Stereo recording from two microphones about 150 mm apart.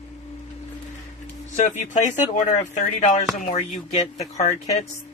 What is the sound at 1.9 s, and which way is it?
Speech, 50° left (ahead or behind).